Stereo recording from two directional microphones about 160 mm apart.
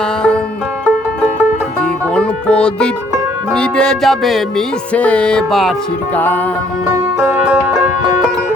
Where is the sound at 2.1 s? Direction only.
5° left (ahead or behind).